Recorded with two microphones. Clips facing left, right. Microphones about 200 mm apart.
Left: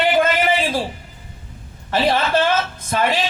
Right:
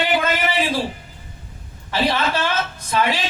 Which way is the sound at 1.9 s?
50° left (ahead or behind).